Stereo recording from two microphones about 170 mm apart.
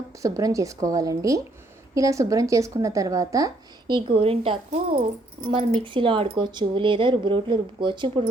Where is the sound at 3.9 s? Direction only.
35° right (ahead or behind).